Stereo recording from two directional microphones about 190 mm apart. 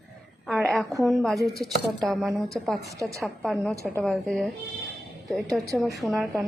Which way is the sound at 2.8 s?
15° right (ahead or behind).